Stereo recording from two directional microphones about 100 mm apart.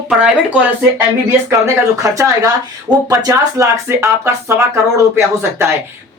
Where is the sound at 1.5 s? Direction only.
30° right (ahead or behind).